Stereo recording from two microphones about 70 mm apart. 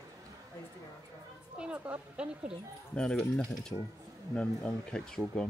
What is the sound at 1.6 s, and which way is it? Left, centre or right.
Speech, centre.